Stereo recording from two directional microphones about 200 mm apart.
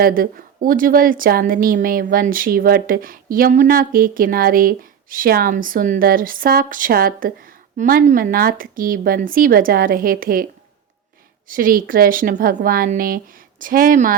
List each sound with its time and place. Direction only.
0.0 s a woman's voice: 45° right (ahead or behind)
11.4 s a woman's voice: 45° right (ahead or behind)